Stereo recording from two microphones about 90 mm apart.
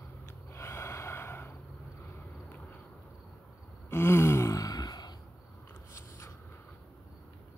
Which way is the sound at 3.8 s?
30° left (ahead or behind).